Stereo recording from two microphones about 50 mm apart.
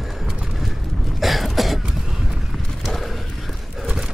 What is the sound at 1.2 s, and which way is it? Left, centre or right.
Cough, centre.